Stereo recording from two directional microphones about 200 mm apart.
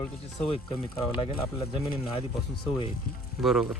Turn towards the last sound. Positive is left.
turn(degrees=0)  # may be behind; listen again after turning